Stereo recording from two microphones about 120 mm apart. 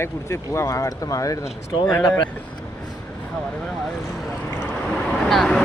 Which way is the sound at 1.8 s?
15° left (ahead or behind).